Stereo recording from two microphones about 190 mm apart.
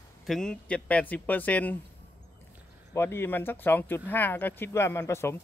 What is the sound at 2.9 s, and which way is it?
Speech, 15° left (ahead or behind).